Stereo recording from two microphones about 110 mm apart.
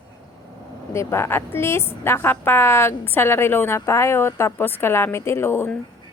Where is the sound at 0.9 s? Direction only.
25° left (ahead or behind).